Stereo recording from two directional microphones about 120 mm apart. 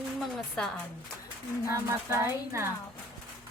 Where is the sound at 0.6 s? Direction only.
5° left (ahead or behind).